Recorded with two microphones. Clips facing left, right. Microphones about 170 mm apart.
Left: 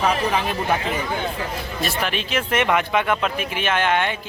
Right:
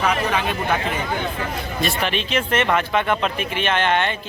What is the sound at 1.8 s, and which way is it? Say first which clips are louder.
Speech: right 2 dB; 5° left (ahead or behind).